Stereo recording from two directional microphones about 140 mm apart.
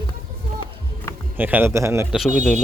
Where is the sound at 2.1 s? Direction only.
5° right (ahead or behind).